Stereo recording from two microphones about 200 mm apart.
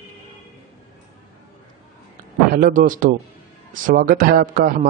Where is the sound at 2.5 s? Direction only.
45° right (ahead or behind).